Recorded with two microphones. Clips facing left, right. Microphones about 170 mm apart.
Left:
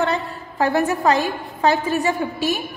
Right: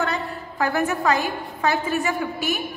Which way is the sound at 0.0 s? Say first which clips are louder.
Left 4 dB; 25° left (ahead or behind).